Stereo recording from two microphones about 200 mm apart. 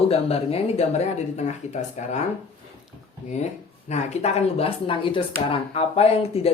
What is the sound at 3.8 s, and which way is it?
Speech, 35° left (ahead or behind).